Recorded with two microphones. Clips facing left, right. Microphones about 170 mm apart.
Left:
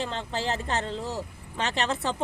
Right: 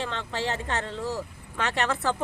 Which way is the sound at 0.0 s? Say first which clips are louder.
Even; 30° left (ahead or behind).